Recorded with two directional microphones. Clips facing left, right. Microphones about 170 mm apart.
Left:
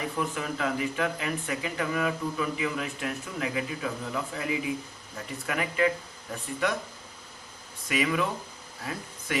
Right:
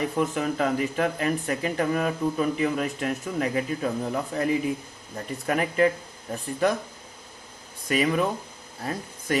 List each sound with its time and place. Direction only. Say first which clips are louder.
0.2 s speech: right 6 dB; 45° right (ahead or behind)
7.9 s speech: right 4 dB; 40° right (ahead or behind)